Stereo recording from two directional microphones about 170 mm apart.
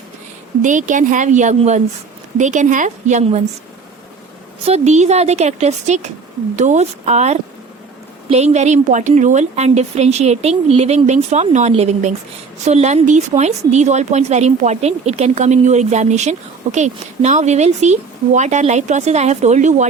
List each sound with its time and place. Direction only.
0.6 s a woman's voice: 50° right (ahead or behind)
4.6 s a woman's voice: 40° right (ahead or behind)